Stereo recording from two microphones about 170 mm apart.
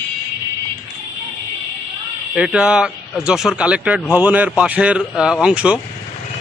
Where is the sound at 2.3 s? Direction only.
5° right (ahead or behind).